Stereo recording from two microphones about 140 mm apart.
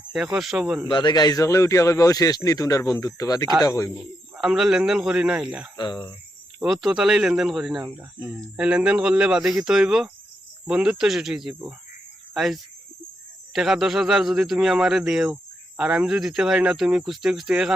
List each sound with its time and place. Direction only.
0.3 s speech: 5° right (ahead or behind)
0.9 s a man's voice: 30° left (ahead or behind)
3.9 s speech: 5° right (ahead or behind)
5.7 s cricket: 35° left (ahead or behind)
6.6 s speech: centre (ahead or behind)